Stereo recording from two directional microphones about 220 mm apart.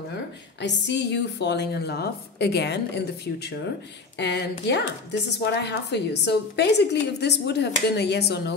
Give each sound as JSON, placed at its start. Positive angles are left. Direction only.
{"t": 0.6, "sound": "a woman's voice", "side_deg": 50}
{"t": 4.2, "sound": "a woman's voice", "side_deg": 50}